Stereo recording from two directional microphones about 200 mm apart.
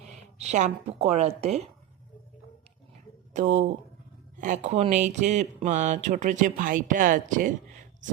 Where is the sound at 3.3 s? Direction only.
35° right (ahead or behind).